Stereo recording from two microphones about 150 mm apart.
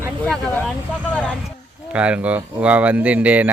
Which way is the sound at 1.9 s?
10° right (ahead or behind).